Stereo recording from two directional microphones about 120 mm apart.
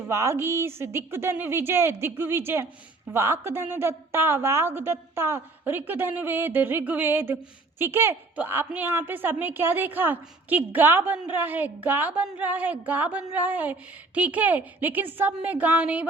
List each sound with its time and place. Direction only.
0.1 s a woman's voice: 25° right (ahead or behind)